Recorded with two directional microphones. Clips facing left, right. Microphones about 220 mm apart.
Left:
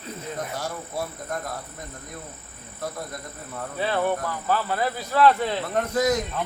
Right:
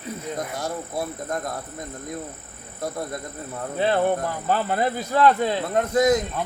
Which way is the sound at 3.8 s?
25° right (ahead or behind).